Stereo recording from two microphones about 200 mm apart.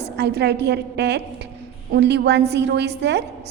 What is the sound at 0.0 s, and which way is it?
A woman's voice, 55° right (ahead or behind).